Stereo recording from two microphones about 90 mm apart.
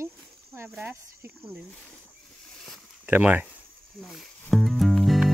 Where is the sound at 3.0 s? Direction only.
20° right (ahead or behind).